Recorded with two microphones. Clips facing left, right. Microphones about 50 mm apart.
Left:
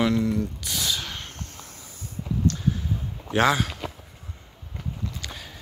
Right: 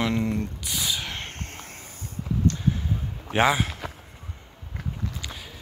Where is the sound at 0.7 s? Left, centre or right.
Centre.